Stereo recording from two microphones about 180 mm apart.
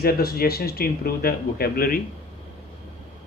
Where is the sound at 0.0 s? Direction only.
55° left (ahead or behind).